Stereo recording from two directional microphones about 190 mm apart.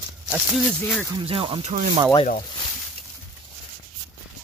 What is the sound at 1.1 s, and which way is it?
Speech, 25° right (ahead or behind).